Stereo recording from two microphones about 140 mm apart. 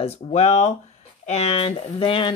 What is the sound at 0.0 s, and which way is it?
Speech, 50° left (ahead or behind).